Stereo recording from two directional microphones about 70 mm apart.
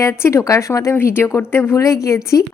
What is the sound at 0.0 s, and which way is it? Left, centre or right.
Speech, left.